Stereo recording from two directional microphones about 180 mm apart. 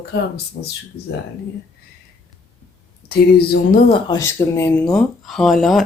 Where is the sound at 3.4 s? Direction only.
60° left (ahead or behind).